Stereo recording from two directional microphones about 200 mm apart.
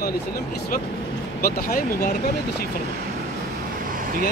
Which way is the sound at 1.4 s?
50° left (ahead or behind).